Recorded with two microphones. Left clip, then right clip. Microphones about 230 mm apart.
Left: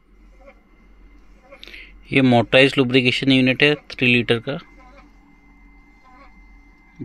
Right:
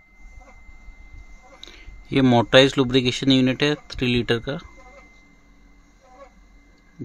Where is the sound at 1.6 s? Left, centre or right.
Centre.